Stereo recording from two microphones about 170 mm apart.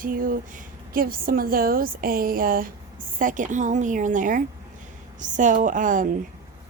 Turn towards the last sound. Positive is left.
turn(degrees=-50)  # may be behind; listen again after turning